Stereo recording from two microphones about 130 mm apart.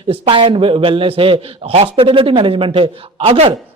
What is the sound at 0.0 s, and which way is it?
Speech, 40° right (ahead or behind).